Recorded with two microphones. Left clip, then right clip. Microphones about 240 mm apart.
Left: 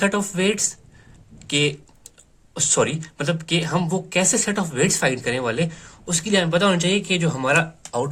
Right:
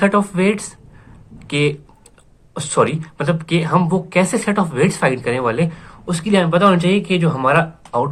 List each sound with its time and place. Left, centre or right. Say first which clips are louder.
0.0 s speech: right 5 dB; left
1.4 s typing: right 3 dB; left
2.5 s speech: right 4 dB; left